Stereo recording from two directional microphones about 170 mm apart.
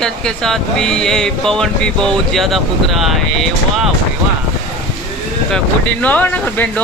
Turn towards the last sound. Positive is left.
turn(degrees=10)  # may be behind; listen again after turning